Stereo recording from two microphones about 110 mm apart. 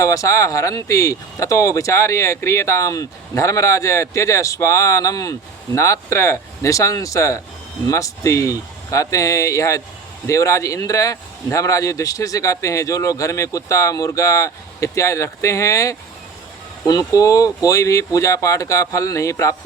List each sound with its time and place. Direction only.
0.0 s speech: 30° left (ahead or behind)